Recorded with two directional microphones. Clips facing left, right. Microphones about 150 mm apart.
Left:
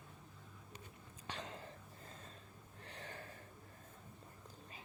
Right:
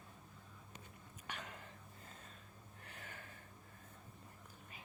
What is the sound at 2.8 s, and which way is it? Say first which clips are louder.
Gasp: left 4 dB; 30° left (ahead or behind).